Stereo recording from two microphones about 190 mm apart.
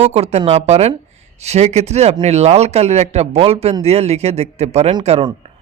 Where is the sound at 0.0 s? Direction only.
35° right (ahead or behind).